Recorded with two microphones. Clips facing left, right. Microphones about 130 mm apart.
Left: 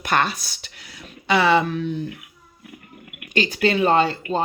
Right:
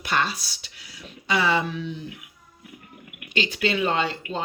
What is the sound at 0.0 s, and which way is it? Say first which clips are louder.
Speech: left 4 dB; 55° left (ahead or behind).